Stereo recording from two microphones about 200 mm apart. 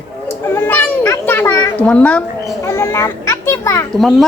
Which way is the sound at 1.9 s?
5° left (ahead or behind).